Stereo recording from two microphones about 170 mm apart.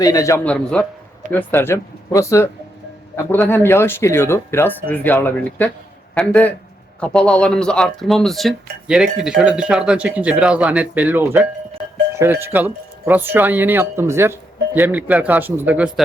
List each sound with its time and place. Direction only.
0.0 s a man's voice: 20° left (ahead or behind)
0.4 s speech: 5° left (ahead or behind); by 15.9 s 10° right (ahead or behind)